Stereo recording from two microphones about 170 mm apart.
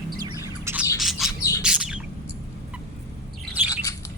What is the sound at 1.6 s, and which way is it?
Bird, 5° right (ahead or behind).